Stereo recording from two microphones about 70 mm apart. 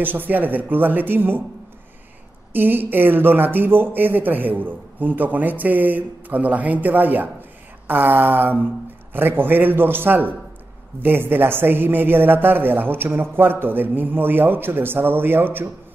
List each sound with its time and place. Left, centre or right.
0.0 s speech: right
2.5 s a man's voice: right